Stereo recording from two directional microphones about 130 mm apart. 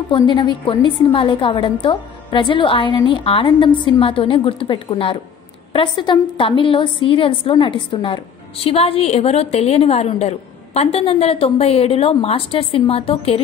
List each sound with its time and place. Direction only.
0.1 s a woman's voice: 35° left (ahead or behind)